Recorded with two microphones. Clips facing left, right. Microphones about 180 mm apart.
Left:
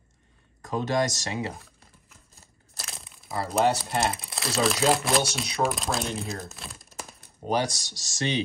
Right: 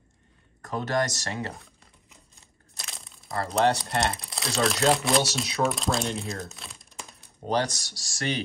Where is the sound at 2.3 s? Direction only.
Centre (ahead or behind).